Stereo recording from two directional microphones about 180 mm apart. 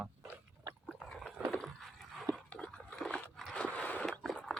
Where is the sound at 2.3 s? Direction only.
5° left (ahead or behind).